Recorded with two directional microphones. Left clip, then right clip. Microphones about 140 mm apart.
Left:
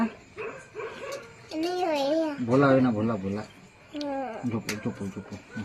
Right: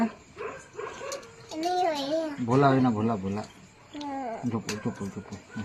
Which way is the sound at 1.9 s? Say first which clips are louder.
Left 4 dB; 45° right (ahead or behind).